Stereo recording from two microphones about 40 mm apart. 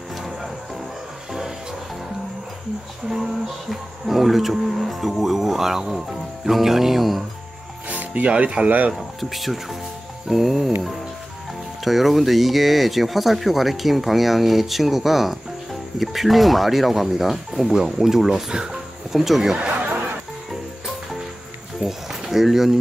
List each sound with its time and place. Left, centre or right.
3.1 s speech: centre
7.9 s speech: right
8.6 s speech: right
8.9 s speech: centre
11.8 s speech: centre
21.8 s speech: right
22.3 s speech: centre